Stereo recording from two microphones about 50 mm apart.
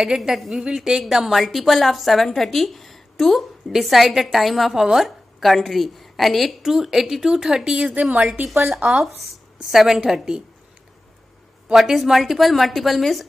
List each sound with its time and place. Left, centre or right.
0.0 s a woman's voice: centre
7.9 s a woman's voice: right
8.9 s speech: centre
11.7 s a woman's voice: centre